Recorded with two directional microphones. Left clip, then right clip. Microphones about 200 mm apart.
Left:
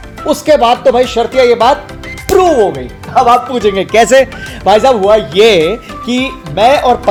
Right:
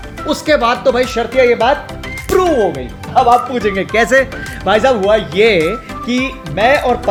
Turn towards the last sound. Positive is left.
turn(degrees=25)  # may be behind; listen again after turning